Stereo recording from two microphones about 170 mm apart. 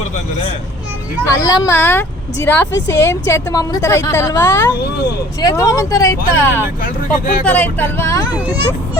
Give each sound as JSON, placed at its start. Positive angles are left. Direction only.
{"t": 1.3, "sound": "a woman's voice", "side_deg": 20}
{"t": 6.8, "sound": "speech", "side_deg": 55}
{"t": 7.4, "sound": "a woman's voice", "side_deg": 10}
{"t": 8.3, "sound": "speech", "side_deg": -10}